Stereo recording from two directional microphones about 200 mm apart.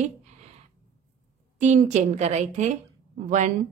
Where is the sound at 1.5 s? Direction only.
35° right (ahead or behind).